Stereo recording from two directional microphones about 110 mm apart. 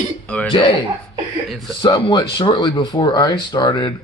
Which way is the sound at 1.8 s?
50° left (ahead or behind).